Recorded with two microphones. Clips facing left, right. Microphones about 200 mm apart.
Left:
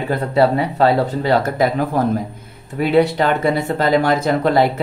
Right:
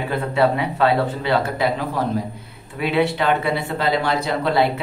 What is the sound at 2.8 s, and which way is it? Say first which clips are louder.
Speech: left 5 dB; 40° left (ahead or behind).